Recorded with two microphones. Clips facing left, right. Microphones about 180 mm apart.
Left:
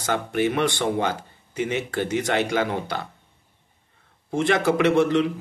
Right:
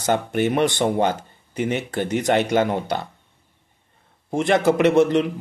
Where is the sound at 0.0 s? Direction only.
20° right (ahead or behind).